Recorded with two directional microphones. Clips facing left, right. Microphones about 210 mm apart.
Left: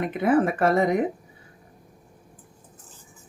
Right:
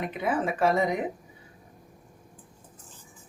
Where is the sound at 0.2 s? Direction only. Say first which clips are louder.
Left 6 dB; 55° left (ahead or behind).